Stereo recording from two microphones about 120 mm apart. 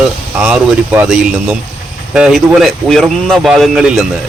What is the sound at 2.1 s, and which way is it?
Speech, 5° right (ahead or behind).